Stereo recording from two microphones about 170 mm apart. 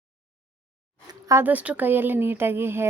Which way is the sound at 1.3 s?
10° right (ahead or behind).